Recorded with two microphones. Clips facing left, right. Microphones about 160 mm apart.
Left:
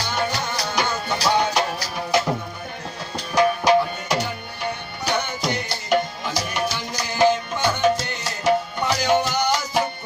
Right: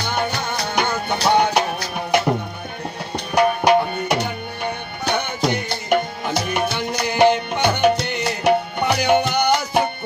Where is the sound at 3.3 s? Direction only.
60° right (ahead or behind).